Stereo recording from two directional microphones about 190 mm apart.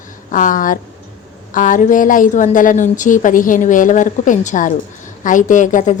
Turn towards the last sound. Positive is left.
turn(degrees=40)  # may be behind; listen again after turning